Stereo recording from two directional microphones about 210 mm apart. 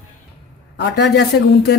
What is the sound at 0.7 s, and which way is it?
Speech, 55° left (ahead or behind).